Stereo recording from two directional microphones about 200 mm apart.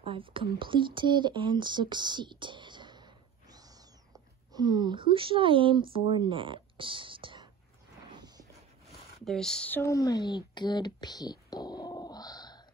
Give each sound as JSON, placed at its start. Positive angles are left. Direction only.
{"t": 0.0, "sound": "speech", "side_deg": -25}
{"t": 8.1, "sound": "a sound", "side_deg": -20}
{"t": 9.2, "sound": "speech", "side_deg": 0}